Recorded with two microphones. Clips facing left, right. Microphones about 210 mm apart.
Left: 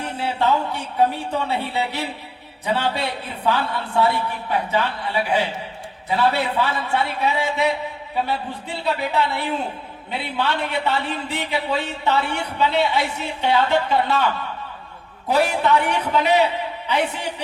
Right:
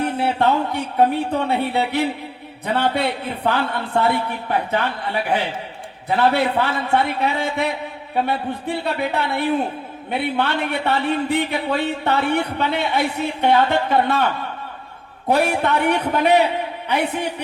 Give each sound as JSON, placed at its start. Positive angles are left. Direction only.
{"t": 0.0, "sound": "speech", "side_deg": -55}
{"t": 6.1, "sound": "speech", "side_deg": -55}
{"t": 15.3, "sound": "speech", "side_deg": -55}